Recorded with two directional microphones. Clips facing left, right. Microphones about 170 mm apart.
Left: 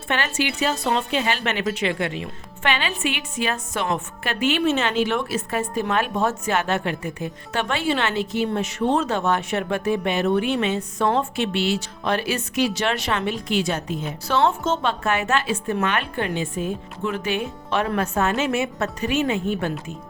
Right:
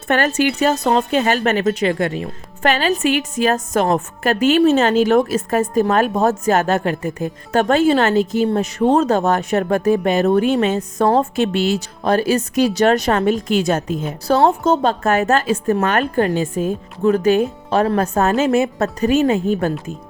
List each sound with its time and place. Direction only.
0.1 s a woman's voice: 45° right (ahead or behind)